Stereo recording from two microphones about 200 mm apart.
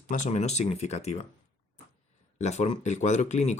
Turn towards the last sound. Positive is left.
turn(degrees=35)  # may be behind; listen again after turning